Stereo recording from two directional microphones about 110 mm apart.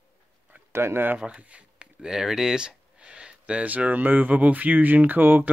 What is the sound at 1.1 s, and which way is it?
Speech, 10° right (ahead or behind).